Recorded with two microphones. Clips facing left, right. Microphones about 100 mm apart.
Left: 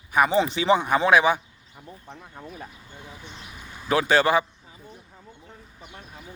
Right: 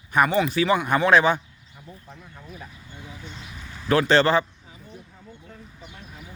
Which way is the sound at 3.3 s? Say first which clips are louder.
Right 1 dB; 15° left (ahead or behind).